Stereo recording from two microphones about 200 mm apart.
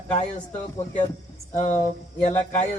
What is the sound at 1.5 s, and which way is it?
A man's voice, 35° left (ahead or behind).